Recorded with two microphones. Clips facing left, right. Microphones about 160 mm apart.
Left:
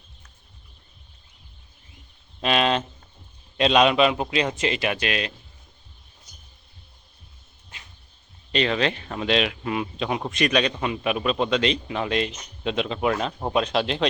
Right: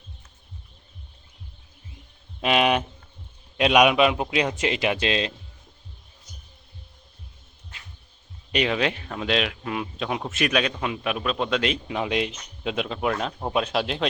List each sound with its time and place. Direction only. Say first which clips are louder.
2.4 s a sound: right 1 dB; 15° right (ahead or behind)
3.6 s a man's voice: even; 10° right (ahead or behind)
8.5 s speech: left 1 dB; 10° right (ahead or behind)